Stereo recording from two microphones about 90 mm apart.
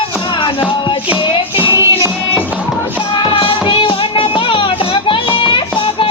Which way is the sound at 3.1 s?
70° left (ahead or behind).